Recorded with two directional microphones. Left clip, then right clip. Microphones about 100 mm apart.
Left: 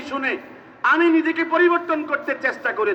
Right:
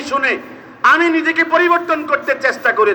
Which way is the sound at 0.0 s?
30° left (ahead or behind).